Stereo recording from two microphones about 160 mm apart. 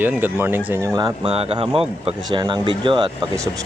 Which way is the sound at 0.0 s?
10° right (ahead or behind).